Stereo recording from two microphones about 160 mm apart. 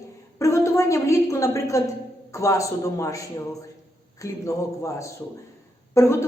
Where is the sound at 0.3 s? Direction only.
20° left (ahead or behind).